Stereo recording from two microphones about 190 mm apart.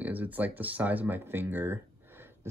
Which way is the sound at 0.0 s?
10° right (ahead or behind).